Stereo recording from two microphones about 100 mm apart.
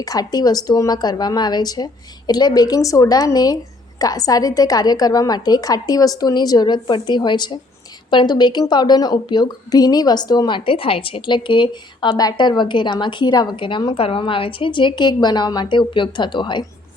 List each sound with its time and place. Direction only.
0.0 s a woman's voice: 40° left (ahead or behind)